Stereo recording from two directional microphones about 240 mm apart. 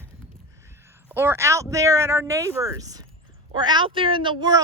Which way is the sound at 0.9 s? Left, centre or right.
Centre.